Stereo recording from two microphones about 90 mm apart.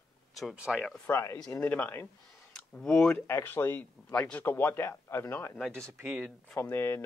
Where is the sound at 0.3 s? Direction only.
Centre (ahead or behind).